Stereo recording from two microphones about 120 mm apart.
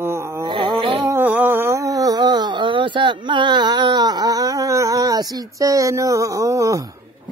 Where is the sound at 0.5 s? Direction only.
45° right (ahead or behind).